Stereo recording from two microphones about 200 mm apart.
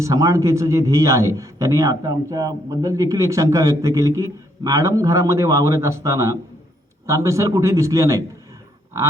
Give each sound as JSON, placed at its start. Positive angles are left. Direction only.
{"t": 0.0, "sound": "a man's voice", "side_deg": -15}